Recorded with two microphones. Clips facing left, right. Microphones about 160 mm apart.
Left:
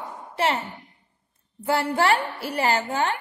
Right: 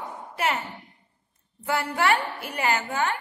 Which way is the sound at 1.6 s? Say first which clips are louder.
Left 3 dB; 30° left (ahead or behind).